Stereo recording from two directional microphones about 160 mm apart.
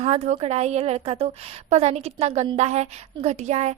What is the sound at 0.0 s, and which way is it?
A woman's voice, 40° right (ahead or behind).